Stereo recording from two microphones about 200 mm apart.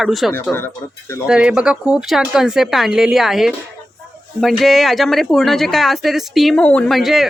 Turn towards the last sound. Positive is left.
turn(degrees=0)  # may be behind; listen again after turning